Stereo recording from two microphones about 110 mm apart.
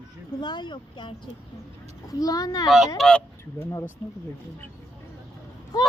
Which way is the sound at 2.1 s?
35° left (ahead or behind).